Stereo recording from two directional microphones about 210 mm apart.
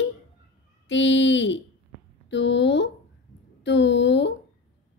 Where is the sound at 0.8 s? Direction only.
60° left (ahead or behind).